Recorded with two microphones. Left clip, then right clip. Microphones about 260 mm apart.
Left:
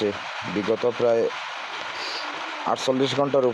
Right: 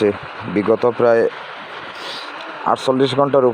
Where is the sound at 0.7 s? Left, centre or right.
Centre.